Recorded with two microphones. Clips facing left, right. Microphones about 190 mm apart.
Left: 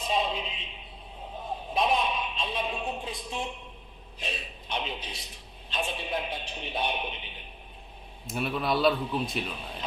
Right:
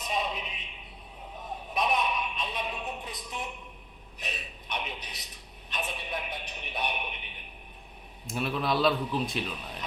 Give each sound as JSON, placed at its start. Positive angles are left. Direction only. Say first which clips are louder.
{"t": 0.0, "sound": "a sound", "louder": "left 3 dB", "side_deg": 30}
{"t": 8.3, "sound": "speech", "louder": "left 1 dB", "side_deg": 0}
{"t": 9.5, "sound": "speech", "louder": "left 1 dB", "side_deg": 30}